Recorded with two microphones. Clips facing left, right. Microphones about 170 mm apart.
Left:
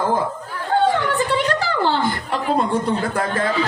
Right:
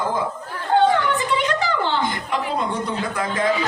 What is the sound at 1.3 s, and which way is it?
A woman's voice, 35° left (ahead or behind).